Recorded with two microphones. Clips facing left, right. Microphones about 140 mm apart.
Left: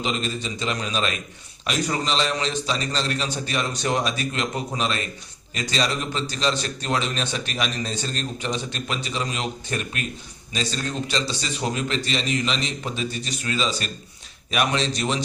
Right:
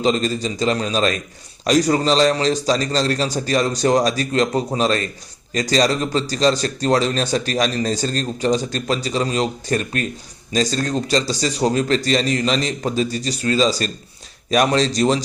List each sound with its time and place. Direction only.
0.0 s a man's voice: 40° right (ahead or behind)